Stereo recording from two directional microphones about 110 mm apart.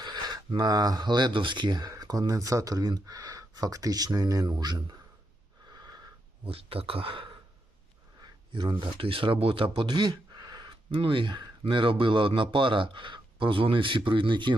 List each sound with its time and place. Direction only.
0.0 s speech: 40° right (ahead or behind)
5.7 s wheeze: 35° right (ahead or behind)
6.4 s speech: 60° right (ahead or behind)